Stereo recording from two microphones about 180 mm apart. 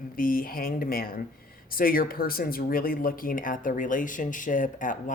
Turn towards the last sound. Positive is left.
turn(degrees=45)  # may be behind; listen again after turning